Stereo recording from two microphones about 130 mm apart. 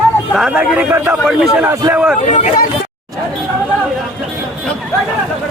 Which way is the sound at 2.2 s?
75° left (ahead or behind).